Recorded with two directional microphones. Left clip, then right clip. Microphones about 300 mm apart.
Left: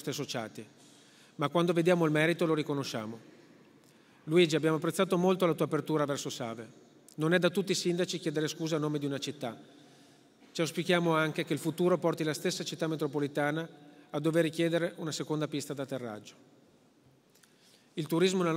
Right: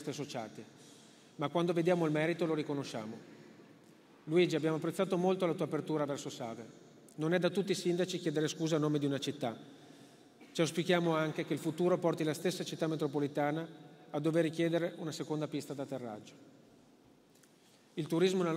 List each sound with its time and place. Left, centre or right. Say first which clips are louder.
0.0 s a man's voice: left 4 dB; left
4.3 s a man's voice: left 4 dB; left
17.9 s a man's voice: left 3 dB; left